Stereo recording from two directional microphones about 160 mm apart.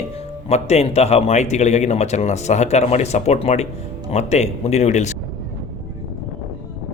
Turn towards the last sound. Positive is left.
turn(degrees=45)  # may be behind; listen again after turning